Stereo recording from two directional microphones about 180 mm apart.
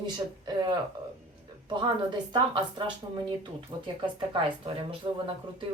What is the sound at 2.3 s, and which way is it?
Speech, 25° right (ahead or behind).